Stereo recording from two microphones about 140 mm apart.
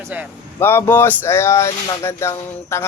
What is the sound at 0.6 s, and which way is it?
Speech, 15° left (ahead or behind).